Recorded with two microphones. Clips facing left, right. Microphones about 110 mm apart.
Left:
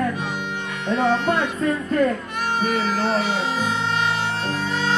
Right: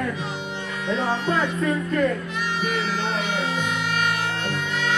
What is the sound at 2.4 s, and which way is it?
Music, 45° left (ahead or behind).